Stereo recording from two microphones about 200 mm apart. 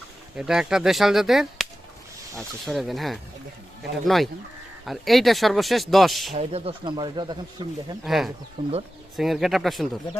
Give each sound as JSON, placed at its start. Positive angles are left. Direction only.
{"t": 0.3, "sound": "speech", "side_deg": -5}
{"t": 6.3, "sound": "speech", "side_deg": -30}
{"t": 8.0, "sound": "speech", "side_deg": 0}
{"t": 8.6, "sound": "speech", "side_deg": -25}
{"t": 9.1, "sound": "speech", "side_deg": 0}